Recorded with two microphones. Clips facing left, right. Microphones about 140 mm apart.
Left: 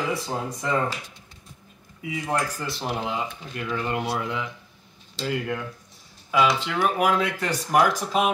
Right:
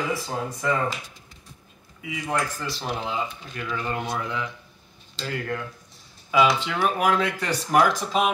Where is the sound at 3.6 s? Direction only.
20° left (ahead or behind).